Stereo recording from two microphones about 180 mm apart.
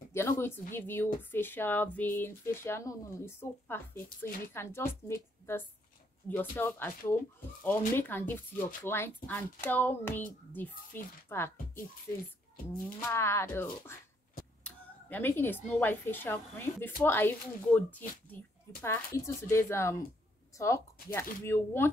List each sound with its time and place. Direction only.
0.1 s a woman's voice: 15° left (ahead or behind)
13.1 s speech: 15° left (ahead or behind)